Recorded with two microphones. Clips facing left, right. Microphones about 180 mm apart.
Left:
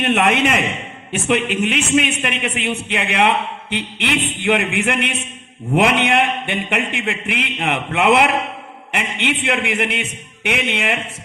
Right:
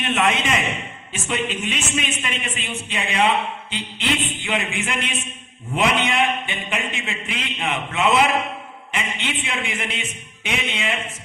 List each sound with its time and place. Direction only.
0.0 s a man's voice: 60° left (ahead or behind)